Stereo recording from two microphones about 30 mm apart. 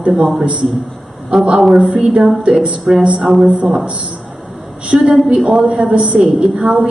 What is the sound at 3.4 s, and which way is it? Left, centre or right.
Speech, right.